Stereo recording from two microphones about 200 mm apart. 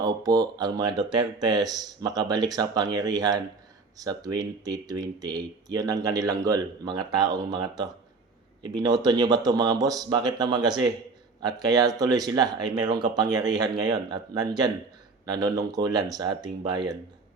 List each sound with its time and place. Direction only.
0.0 s speech: 20° right (ahead or behind)